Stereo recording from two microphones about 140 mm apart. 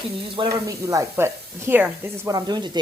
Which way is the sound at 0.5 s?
25° right (ahead or behind).